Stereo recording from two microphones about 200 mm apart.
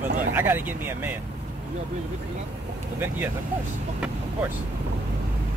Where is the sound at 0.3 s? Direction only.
10° right (ahead or behind).